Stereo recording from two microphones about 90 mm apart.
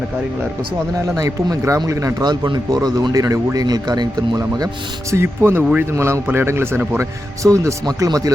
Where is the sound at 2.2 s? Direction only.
55° right (ahead or behind).